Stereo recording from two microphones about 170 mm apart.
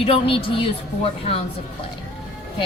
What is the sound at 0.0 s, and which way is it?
Speech, 30° left (ahead or behind).